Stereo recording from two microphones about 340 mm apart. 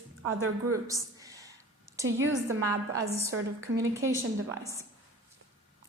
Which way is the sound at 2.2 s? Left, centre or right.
Right.